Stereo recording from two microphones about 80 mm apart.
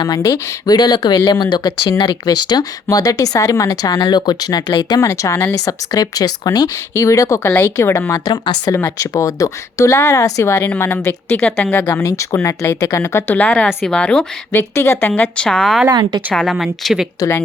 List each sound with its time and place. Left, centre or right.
0.0 s speech: left
5.0 s a woman's voice: left
5.5 s speech: left
6.9 s a woman's voice: left
8.2 s speech: left
9.0 s a woman's voice: left
12.0 s a woman's voice: left
13.3 s a woman's voice: centre
14.5 s a woman's voice: left
15.4 s a woman's voice: centre
17.2 s a woman's voice: left